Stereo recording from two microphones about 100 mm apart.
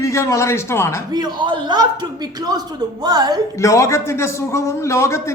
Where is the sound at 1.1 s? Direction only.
45° right (ahead or behind).